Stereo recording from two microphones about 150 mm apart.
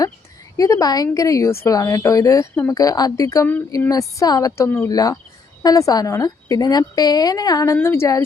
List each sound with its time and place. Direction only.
0.5 s a woman's voice: 20° left (ahead or behind)